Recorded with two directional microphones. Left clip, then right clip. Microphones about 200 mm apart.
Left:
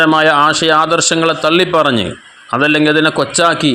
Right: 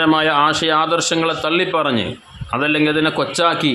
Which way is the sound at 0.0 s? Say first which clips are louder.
Left 5 dB; 20° left (ahead or behind).